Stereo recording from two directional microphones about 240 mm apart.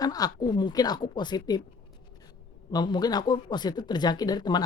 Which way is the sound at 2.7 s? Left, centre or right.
Centre.